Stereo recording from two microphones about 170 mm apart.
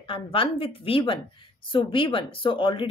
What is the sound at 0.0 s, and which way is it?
Speech, 30° left (ahead or behind).